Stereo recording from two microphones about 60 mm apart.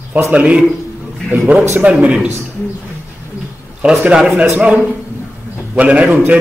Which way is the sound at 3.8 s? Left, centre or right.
Centre.